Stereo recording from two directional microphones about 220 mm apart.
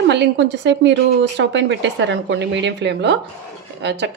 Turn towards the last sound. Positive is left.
turn(degrees=-50)  # may be behind; listen again after turning